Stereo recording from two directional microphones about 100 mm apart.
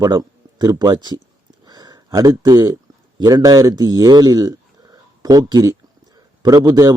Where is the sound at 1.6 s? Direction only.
45° right (ahead or behind).